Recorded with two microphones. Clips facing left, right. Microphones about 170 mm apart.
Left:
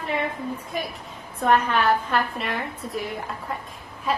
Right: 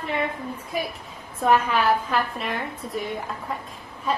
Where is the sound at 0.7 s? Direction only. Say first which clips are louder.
Right 1 dB; 5° right (ahead or behind).